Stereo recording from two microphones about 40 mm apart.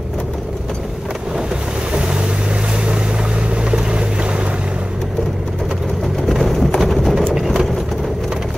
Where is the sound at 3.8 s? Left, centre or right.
Right.